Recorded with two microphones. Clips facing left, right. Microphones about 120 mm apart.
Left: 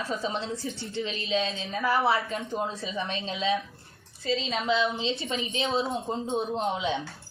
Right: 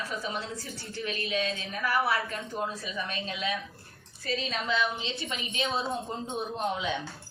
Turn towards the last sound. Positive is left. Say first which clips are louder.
# left 3 dB
turn(degrees=25)  # may be behind; listen again after turning